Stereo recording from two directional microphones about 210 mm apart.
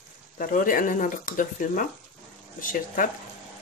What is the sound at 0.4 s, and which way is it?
Speech, 40° left (ahead or behind).